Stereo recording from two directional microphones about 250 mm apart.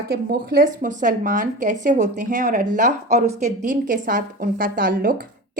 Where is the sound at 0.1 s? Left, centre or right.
Right.